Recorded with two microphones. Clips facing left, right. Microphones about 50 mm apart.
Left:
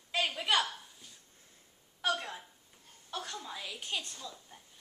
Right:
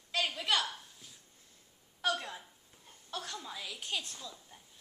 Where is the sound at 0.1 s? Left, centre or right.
Centre.